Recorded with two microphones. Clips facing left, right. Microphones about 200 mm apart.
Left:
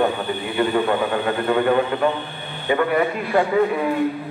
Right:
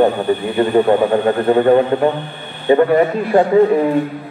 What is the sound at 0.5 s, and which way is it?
A man's voice, 35° right (ahead or behind).